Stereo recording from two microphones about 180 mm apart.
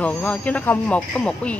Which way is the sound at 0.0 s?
10° left (ahead or behind).